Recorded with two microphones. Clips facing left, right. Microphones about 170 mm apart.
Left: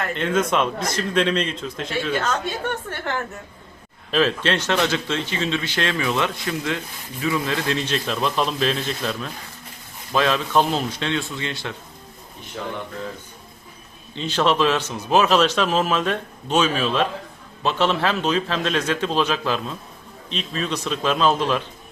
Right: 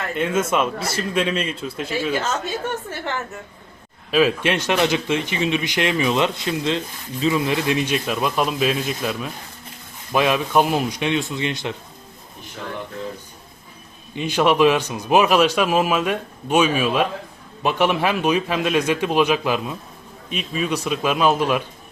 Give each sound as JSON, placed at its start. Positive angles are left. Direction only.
{"t": 0.1, "sound": "speech", "side_deg": -10}
{"t": 4.1, "sound": "speech", "side_deg": -10}
{"t": 14.2, "sound": "speech", "side_deg": -10}